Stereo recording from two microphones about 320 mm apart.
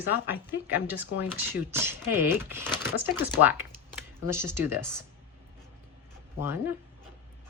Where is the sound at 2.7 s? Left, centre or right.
Centre.